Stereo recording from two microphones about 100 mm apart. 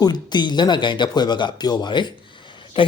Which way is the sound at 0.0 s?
45° left (ahead or behind).